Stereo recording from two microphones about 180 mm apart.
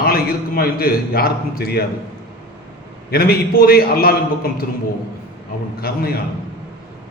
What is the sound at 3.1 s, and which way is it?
A man's voice, 60° left (ahead or behind).